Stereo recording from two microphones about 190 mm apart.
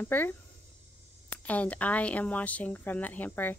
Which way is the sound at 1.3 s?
5° left (ahead or behind).